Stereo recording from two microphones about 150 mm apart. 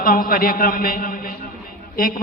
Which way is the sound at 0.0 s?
70° left (ahead or behind).